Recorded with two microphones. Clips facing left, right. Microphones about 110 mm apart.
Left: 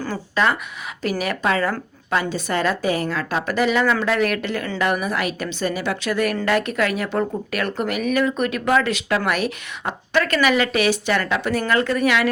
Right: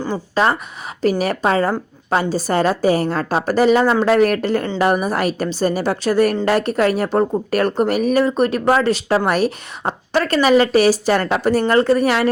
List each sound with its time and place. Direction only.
0.4 s speech: 35° right (ahead or behind)